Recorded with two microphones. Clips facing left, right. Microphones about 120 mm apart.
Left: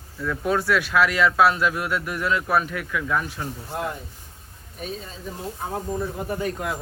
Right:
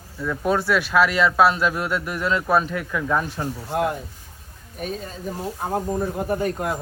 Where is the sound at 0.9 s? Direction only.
20° right (ahead or behind).